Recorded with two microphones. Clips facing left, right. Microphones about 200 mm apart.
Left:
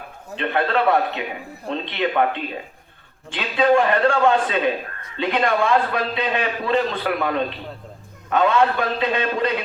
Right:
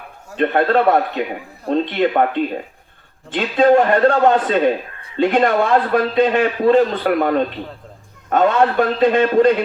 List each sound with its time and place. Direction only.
0.3 s a man's voice: 45° right (ahead or behind)